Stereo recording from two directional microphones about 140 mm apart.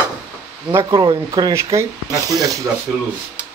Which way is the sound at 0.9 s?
30° right (ahead or behind).